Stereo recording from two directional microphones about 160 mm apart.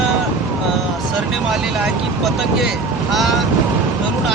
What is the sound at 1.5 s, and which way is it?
Speech, centre (ahead or behind).